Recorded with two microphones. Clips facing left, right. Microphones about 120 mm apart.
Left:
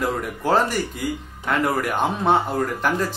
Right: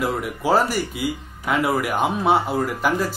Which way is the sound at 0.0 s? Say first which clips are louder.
Right 1 dB; 5° right (ahead or behind).